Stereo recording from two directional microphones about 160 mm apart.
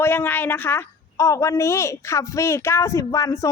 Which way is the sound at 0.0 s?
15° left (ahead or behind).